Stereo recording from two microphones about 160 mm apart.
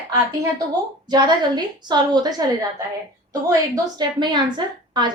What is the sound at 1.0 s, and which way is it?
A woman's voice, 25° right (ahead or behind).